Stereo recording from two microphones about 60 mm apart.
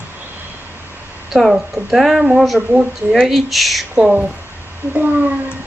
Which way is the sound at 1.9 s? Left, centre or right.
Centre.